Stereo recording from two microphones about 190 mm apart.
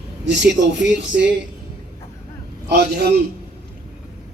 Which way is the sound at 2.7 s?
55° right (ahead or behind).